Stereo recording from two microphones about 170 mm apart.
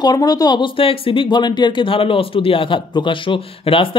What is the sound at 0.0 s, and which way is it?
Speech, 25° left (ahead or behind).